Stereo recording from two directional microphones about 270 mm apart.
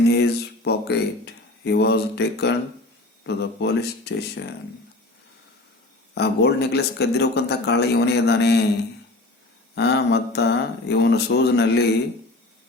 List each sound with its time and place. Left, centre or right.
0.1 s speech: left
6.1 s speech: left
9.7 s speech: left